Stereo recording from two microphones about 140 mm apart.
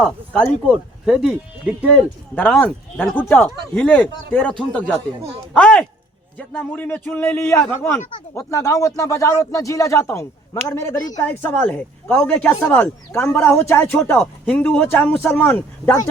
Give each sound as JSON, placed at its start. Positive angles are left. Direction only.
{"t": 0.7, "sound": "speech", "side_deg": 0}
{"t": 2.3, "sound": "speech", "side_deg": 10}
{"t": 11.3, "sound": "speech", "side_deg": 10}